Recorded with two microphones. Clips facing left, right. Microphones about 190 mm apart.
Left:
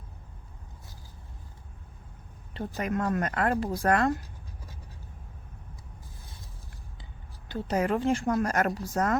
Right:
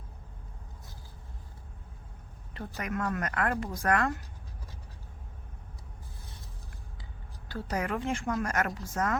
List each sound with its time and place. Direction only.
2.5 s a woman's voice: 30° left (ahead or behind)
7.4 s a woman's voice: 25° left (ahead or behind)